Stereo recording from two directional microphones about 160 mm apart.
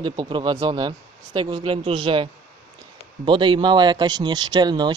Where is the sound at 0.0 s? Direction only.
30° right (ahead or behind).